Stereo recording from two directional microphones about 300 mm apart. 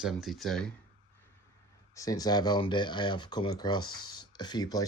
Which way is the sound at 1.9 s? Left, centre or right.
Centre.